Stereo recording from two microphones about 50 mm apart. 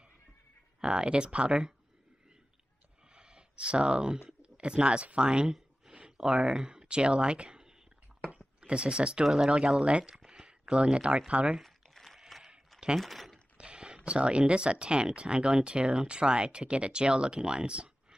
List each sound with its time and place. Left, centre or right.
0.7 s speech: centre
3.2 s a sound: centre
4.4 s speech: right
8.3 s a sound: right
9.2 s speech: centre
9.6 s speech: right
10.1 s a sound: centre
10.4 s speech: right
11.6 s crumpling: centre
13.0 s speech: centre
13.6 s speech: centre